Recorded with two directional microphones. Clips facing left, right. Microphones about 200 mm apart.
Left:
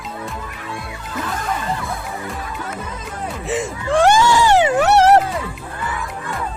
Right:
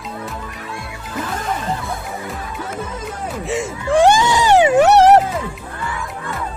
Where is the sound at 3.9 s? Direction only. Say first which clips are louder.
Right 1 dB; 20° right (ahead or behind).